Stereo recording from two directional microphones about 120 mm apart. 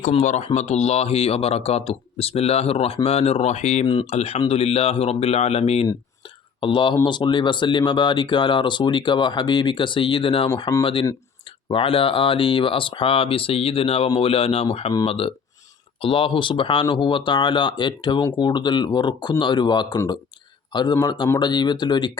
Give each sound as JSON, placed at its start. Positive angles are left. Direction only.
{"t": 0.2, "sound": "speech", "side_deg": 75}
{"t": 0.4, "sound": "speech", "side_deg": 65}
{"t": 6.6, "sound": "speech", "side_deg": 45}
{"t": 11.7, "sound": "speech", "side_deg": 45}